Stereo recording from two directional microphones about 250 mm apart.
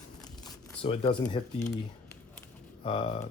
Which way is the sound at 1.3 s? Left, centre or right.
Left.